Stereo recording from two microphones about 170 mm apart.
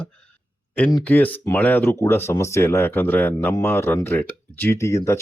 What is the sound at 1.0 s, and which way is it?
Speech, 10° left (ahead or behind).